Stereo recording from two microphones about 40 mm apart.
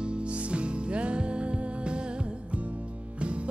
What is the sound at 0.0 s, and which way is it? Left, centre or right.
Music, right.